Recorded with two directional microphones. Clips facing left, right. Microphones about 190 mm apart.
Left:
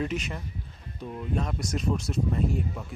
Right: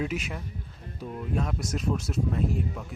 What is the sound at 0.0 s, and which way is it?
A man's voice, 5° right (ahead or behind).